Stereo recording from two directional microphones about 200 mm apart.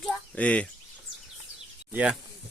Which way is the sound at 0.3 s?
5° left (ahead or behind).